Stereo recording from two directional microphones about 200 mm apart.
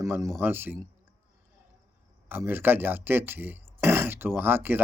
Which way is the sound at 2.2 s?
10° right (ahead or behind).